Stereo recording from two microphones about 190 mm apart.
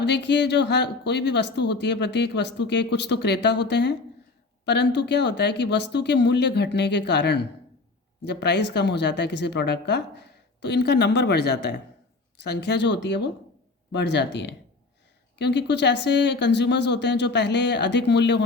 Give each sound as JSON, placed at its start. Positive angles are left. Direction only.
{"t": 0.0, "sound": "speech", "side_deg": 65}